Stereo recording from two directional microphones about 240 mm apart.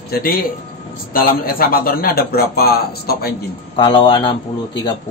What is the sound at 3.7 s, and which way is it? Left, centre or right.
Speech, centre.